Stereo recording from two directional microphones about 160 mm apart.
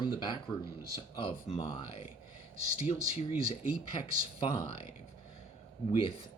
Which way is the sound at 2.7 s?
40° left (ahead or behind).